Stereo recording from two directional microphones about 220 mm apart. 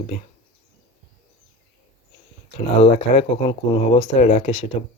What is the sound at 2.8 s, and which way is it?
Speech, 30° left (ahead or behind).